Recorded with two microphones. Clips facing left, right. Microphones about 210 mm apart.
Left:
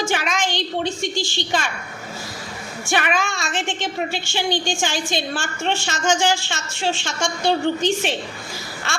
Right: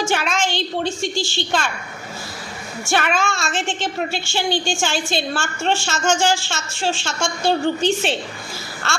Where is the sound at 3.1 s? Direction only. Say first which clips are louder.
Right 2 dB; 15° left (ahead or behind).